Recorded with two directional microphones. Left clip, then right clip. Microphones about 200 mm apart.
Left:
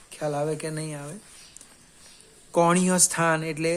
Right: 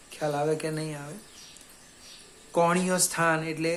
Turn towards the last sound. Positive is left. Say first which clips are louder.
# left 2 dB
turn(degrees=40)  # may be behind; listen again after turning